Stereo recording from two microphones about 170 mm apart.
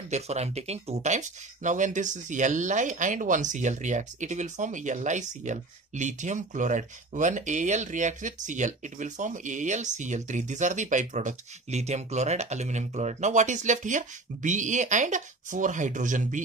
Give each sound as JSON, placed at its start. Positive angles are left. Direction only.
{"t": 0.1, "sound": "speech", "side_deg": -40}